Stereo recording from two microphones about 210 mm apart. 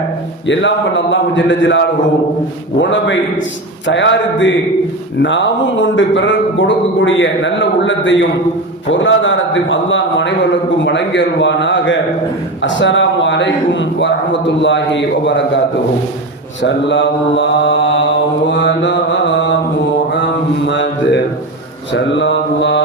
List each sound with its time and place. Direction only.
0.4 s a man's voice: 60° left (ahead or behind)
16.6 s a man's voice: 60° left (ahead or behind)
19.4 s mantra: 60° left (ahead or behind)
21.9 s a man's voice: 60° left (ahead or behind)